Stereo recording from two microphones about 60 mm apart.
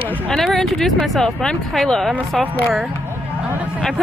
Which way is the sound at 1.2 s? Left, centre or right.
Centre.